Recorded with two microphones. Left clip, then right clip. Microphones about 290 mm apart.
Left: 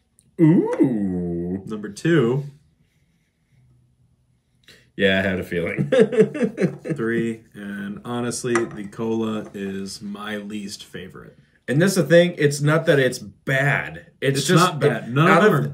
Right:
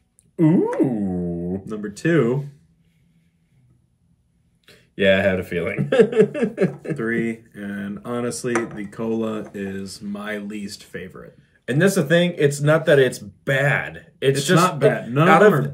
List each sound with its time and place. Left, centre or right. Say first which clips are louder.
0.4 s speech: left 1 dB; centre
0.7 s a sound: left 1 dB; centre
1.6 s speech: right 2 dB; centre
4.6 s speech: right 3 dB; centre
7.0 s speech: even; centre
11.6 s speech: right 1 dB; centre